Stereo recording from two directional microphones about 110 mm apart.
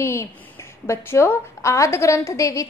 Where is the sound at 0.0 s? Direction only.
25° left (ahead or behind).